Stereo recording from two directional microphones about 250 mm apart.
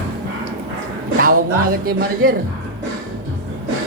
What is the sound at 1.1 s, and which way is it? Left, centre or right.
A man's voice, right.